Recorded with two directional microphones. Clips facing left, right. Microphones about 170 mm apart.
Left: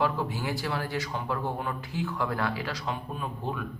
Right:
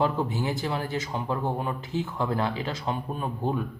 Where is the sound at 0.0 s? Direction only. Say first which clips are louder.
Right 3 dB; 25° right (ahead or behind).